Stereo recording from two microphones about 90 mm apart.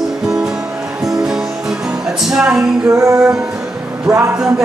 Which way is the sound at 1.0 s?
5° right (ahead or behind).